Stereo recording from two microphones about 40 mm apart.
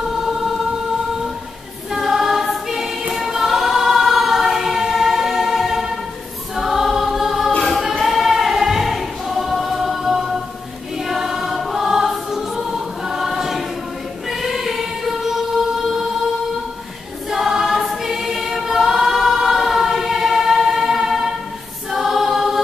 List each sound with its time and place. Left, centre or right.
1.9 s choir: centre
14.4 s music: centre
17.3 s choir: centre